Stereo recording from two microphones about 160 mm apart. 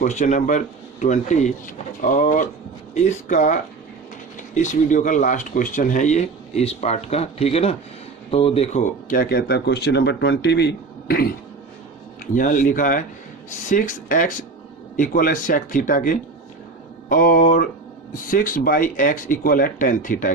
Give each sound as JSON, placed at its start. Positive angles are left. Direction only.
{"t": 0.0, "sound": "speech", "side_deg": 45}
{"t": 12.3, "sound": "speech", "side_deg": 55}